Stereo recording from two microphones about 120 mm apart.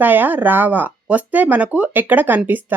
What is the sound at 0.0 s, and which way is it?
Speech, 15° right (ahead or behind).